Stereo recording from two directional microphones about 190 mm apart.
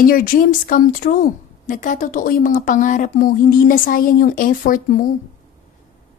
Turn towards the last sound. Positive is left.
turn(degrees=45)  # may be behind; listen again after turning